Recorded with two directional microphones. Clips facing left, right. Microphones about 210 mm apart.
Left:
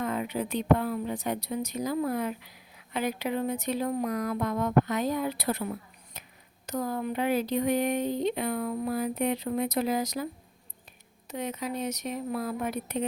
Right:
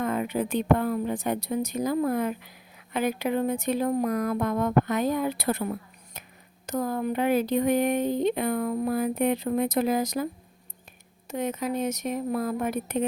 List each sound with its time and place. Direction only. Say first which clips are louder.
0.0 s speech: right 3 dB; 50° right (ahead or behind)
6.2 s a sound: right 3 dB; 50° right (ahead or behind)
6.7 s speech: right 3 dB; 50° right (ahead or behind)
11.3 s speech: right 5 dB; 50° right (ahead or behind)